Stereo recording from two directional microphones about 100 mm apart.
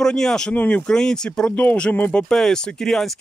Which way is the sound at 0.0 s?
5° left (ahead or behind).